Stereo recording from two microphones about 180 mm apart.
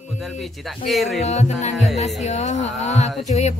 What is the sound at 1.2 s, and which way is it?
Speech, 40° left (ahead or behind).